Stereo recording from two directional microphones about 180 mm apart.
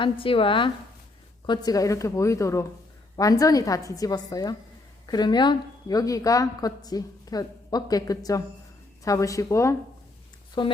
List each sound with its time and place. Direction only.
0.0 s a woman's voice: 30° left (ahead or behind)